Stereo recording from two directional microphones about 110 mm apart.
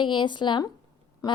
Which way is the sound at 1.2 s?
35° left (ahead or behind).